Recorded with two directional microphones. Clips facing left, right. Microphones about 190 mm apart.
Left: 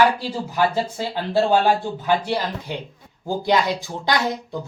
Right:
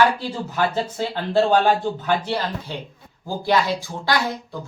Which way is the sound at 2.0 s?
10° left (ahead or behind).